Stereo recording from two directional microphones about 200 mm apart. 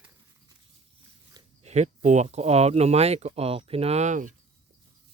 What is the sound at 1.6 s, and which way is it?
Speech, 35° right (ahead or behind).